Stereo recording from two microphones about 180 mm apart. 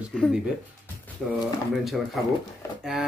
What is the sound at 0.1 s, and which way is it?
Speech, 5° left (ahead or behind).